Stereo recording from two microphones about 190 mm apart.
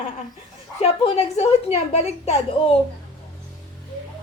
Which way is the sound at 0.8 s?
35° left (ahead or behind).